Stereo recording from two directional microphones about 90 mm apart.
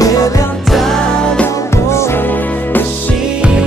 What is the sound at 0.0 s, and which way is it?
Music, 40° left (ahead or behind).